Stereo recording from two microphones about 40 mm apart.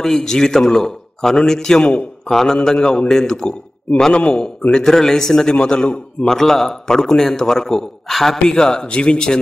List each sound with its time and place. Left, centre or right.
0.0 s a man's voice: centre
4.1 s speech: left
4.6 s a man's voice: centre
6.3 s a man's voice: centre
8.5 s a man's voice: centre